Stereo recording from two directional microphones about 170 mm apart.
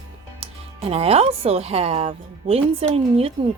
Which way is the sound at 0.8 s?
35° right (ahead or behind).